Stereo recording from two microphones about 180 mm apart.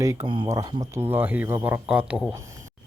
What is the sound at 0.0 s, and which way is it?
Speech, 15° right (ahead or behind).